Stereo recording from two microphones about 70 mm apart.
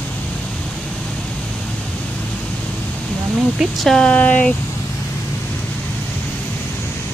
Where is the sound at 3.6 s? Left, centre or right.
Centre.